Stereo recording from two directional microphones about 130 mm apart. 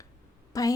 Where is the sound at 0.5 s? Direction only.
25° left (ahead or behind).